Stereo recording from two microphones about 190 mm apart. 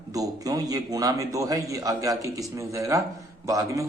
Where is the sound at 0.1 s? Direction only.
20° right (ahead or behind).